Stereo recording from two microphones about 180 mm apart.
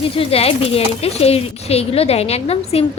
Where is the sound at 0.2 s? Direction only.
35° left (ahead or behind).